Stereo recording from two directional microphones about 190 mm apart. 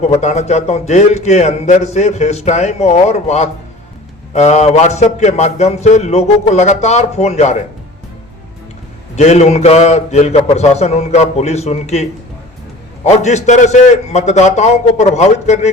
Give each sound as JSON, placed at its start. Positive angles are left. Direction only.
{"t": 0.0, "sound": "a man's voice", "side_deg": 35}
{"t": 9.1, "sound": "a man's voice", "side_deg": 35}
{"t": 13.1, "sound": "a man's voice", "side_deg": 35}